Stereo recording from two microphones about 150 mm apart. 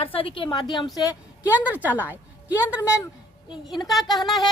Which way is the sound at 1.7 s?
10° right (ahead or behind).